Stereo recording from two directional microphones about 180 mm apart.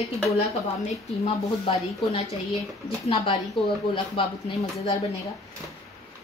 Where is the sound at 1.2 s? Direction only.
30° left (ahead or behind).